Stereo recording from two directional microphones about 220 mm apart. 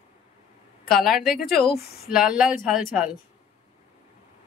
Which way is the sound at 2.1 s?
5° right (ahead or behind).